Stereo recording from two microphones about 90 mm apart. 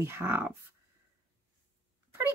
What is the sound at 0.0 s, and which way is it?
Speech, 25° right (ahead or behind).